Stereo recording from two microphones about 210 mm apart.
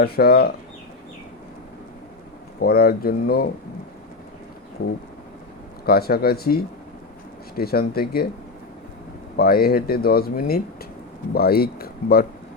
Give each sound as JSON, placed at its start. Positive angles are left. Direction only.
{"t": 0.0, "sound": "speech", "side_deg": 45}
{"t": 2.6, "sound": "speech", "side_deg": 45}
{"t": 5.8, "sound": "speech", "side_deg": 45}
{"t": 9.4, "sound": "speech", "side_deg": 45}